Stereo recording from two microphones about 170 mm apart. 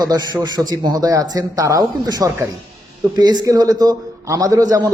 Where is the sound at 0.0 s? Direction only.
25° right (ahead or behind).